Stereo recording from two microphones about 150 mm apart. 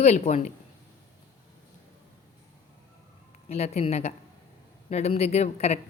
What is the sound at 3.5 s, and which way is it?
A woman's voice, 45° left (ahead or behind).